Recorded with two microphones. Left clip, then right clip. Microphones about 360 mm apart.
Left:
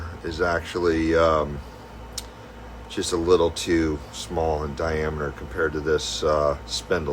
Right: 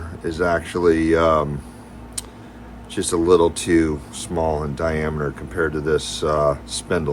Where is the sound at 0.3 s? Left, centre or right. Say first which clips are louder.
Right 4 dB; centre.